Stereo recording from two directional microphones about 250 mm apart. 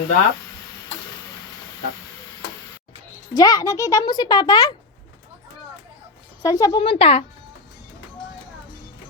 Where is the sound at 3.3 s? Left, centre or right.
Centre.